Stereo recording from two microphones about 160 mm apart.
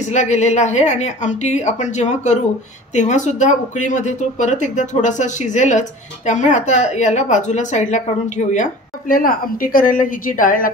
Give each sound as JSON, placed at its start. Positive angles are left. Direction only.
{"t": 0.1, "sound": "a woman's voice", "side_deg": 45}